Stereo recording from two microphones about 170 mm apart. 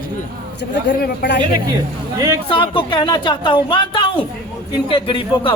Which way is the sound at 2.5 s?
30° left (ahead or behind).